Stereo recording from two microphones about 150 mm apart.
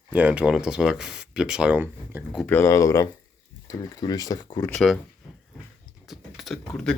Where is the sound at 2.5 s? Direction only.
15° left (ahead or behind).